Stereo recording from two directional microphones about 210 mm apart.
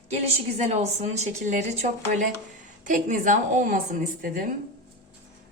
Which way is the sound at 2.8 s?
40° right (ahead or behind).